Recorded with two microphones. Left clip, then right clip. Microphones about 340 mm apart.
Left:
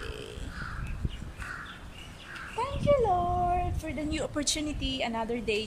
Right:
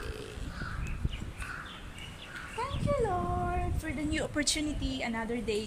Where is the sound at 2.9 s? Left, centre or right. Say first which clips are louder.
Left 7 dB; centre.